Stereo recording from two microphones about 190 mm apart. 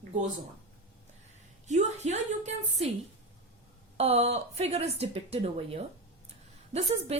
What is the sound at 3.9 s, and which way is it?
A woman's voice, 35° right (ahead or behind).